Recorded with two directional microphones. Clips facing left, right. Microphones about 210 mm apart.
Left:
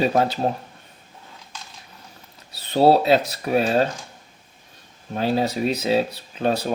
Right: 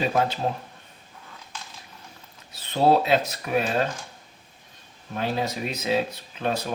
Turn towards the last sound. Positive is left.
turn(degrees=35)  # may be behind; listen again after turning